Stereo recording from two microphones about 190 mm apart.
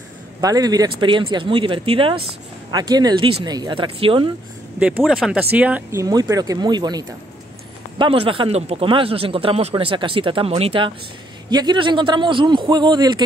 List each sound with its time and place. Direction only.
0.4 s speech: 20° right (ahead or behind)
4.7 s speech: 5° right (ahead or behind); by 13.2 s 25° right (ahead or behind)